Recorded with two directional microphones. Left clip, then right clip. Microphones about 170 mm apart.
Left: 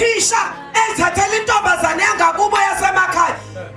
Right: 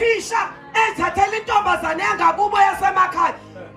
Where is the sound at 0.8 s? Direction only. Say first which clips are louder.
Left 2 dB; 30° left (ahead or behind).